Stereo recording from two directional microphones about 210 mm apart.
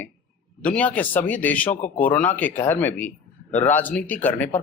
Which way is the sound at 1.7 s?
35° left (ahead or behind).